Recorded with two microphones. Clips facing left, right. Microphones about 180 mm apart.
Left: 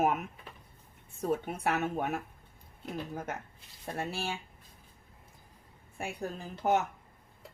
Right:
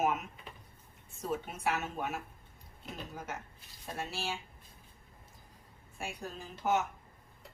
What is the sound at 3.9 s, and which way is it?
Speech, 55° left (ahead or behind).